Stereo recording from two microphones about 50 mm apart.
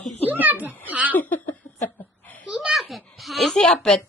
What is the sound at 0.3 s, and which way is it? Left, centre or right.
Speech, right.